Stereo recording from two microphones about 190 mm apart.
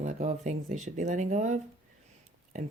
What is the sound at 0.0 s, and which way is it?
Speech, 40° right (ahead or behind).